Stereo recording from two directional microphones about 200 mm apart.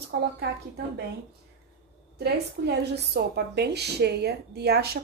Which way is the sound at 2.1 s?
55° right (ahead or behind).